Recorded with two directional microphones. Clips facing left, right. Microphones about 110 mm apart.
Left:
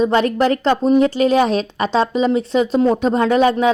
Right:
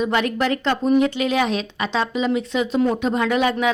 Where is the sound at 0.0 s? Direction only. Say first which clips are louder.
Left 5 dB; 35° left (ahead or behind).